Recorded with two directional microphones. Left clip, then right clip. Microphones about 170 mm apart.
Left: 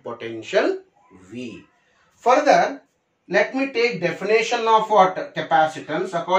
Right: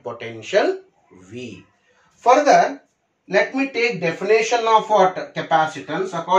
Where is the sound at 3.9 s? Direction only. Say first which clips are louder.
Right 2 dB; 25° right (ahead or behind).